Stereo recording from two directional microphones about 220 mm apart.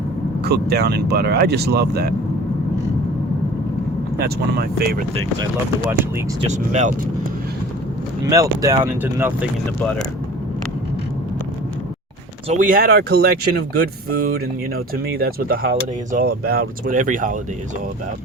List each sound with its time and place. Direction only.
0.4 s speech: 45° right (ahead or behind)
4.2 s speech: 45° right (ahead or behind)
6.5 s speech: 30° right (ahead or behind)
8.3 s speech: 15° right (ahead or behind)
12.5 s speech: 35° right (ahead or behind)